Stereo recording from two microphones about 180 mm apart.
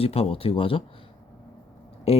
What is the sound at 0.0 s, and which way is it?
Speech, 35° left (ahead or behind).